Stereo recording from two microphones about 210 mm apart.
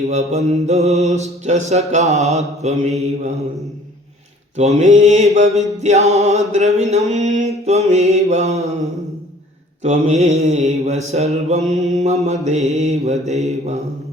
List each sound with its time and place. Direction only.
0.1 s mantra: 30° right (ahead or behind)
4.5 s mantra: 35° right (ahead or behind)
9.8 s mantra: 35° right (ahead or behind)